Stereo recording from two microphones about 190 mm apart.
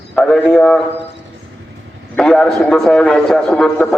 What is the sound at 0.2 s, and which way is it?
Speech, 5° left (ahead or behind).